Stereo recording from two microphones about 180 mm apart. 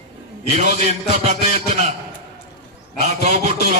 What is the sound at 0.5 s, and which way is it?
Speech, 40° right (ahead or behind).